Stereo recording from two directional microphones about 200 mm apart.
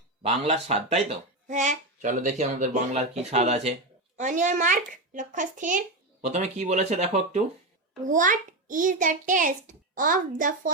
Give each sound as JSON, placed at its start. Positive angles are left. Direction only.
{"t": 0.2, "sound": "a child's voice", "side_deg": -30}